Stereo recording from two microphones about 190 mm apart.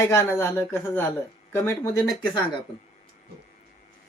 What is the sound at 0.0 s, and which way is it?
A woman's voice, 15° left (ahead or behind).